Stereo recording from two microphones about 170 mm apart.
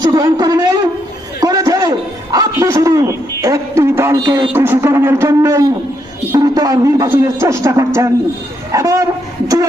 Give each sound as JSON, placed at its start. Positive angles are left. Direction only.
{"t": 0.0, "sound": "a man's voice", "side_deg": -25}
{"t": 1.4, "sound": "a sound", "side_deg": -20}
{"t": 4.5, "sound": "a man's voice", "side_deg": -15}